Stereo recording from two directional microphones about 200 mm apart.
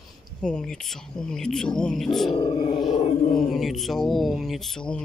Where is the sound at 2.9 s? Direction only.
35° left (ahead or behind).